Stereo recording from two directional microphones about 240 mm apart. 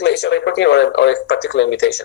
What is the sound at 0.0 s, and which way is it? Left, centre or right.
Speech, left.